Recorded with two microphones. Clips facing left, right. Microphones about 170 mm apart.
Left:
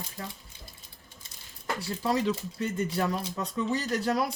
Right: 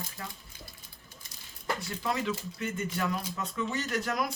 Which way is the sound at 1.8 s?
35° left (ahead or behind).